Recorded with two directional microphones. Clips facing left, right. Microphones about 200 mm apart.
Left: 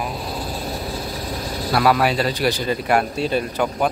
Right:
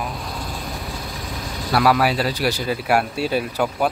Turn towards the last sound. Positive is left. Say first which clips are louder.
# even
turn(degrees=-5)  # may be behind; listen again after turning